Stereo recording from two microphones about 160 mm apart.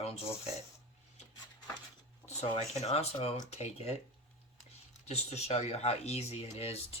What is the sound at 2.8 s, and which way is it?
Speech, 40° left (ahead or behind).